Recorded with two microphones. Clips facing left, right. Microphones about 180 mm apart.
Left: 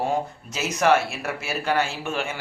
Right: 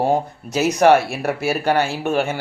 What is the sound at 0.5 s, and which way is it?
Speech, 35° right (ahead or behind).